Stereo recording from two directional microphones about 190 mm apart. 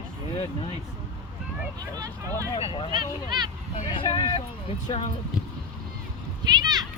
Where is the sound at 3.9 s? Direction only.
25° left (ahead or behind).